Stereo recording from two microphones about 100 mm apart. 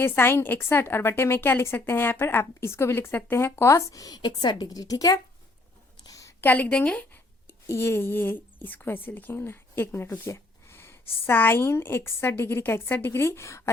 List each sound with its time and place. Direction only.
0.0 s a woman's voice: 25° left (ahead or behind)
6.1 s a sound: 35° left (ahead or behind)
6.4 s a woman's voice: 15° left (ahead or behind)
7.4 s a woman's voice: 25° left (ahead or behind)